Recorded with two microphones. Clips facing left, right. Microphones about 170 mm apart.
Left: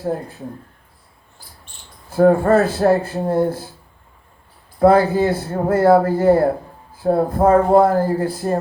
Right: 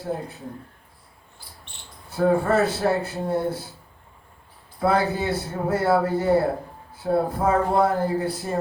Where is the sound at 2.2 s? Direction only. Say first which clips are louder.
Left 6 dB; 50° left (ahead or behind).